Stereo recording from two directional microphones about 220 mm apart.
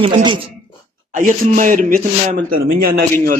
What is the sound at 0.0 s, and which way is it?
Speech, 20° right (ahead or behind).